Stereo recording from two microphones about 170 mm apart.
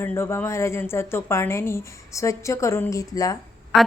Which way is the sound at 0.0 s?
15° left (ahead or behind).